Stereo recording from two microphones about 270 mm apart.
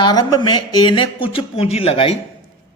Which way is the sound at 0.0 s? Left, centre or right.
Centre.